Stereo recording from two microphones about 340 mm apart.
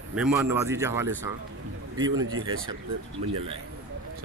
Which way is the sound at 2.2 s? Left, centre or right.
Right.